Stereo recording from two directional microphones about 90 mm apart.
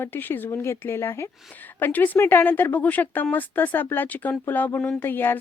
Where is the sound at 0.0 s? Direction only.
20° left (ahead or behind).